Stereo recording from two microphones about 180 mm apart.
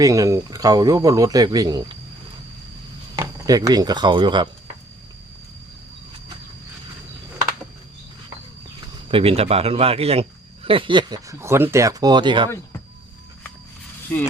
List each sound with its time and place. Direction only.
0.0 s a man's voice: 20° right (ahead or behind)
3.2 s speech: 20° right (ahead or behind)
9.0 s a man's voice: 30° right (ahead or behind)
14.1 s speech: 10° left (ahead or behind)